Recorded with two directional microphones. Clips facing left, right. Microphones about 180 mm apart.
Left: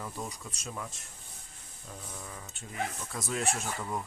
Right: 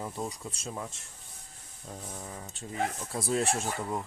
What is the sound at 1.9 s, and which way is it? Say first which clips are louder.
Speech: right 3 dB; 35° right (ahead or behind).